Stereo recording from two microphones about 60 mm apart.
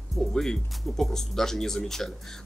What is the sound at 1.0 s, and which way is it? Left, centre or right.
Speech, centre.